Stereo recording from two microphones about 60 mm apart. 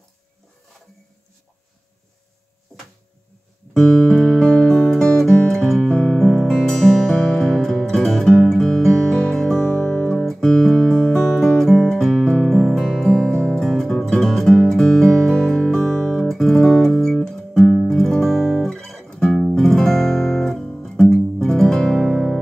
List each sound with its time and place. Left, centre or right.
3.7 s music: centre
13.2 s music: centre
13.6 s music: centre